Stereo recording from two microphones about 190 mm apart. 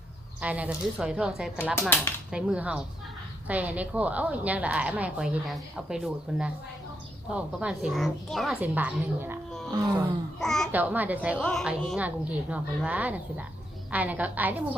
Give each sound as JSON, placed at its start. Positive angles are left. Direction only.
{"t": 0.4, "sound": "a woman's voice", "side_deg": -5}
{"t": 8.6, "sound": "a woman's voice", "side_deg": -10}
{"t": 10.4, "sound": "a woman's voice", "side_deg": 0}
{"t": 10.7, "sound": "a woman's voice", "side_deg": -10}